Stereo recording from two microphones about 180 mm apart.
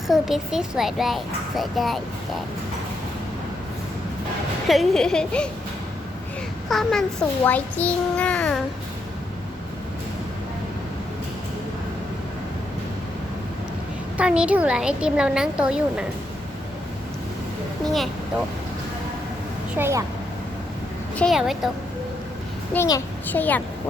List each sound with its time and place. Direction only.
0.1 s a child's voice: centre (ahead or behind)
4.7 s a child's voice: centre (ahead or behind)
6.7 s a child's voice: centre (ahead or behind)
14.2 s a child's voice: 5° right (ahead or behind)
19.7 s speech: 15° right (ahead or behind)
21.2 s a child's voice: centre (ahead or behind)
22.7 s a child's voice: 15° left (ahead or behind)